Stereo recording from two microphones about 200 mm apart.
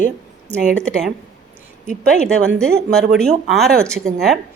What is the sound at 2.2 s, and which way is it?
A woman's voice, 5° left (ahead or behind).